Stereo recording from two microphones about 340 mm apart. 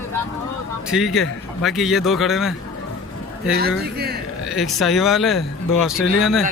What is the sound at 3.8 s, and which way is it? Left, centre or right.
Speech, right.